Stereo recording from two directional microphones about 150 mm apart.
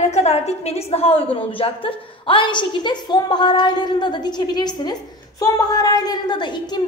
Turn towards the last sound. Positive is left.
turn(degrees=30)  # may be behind; listen again after turning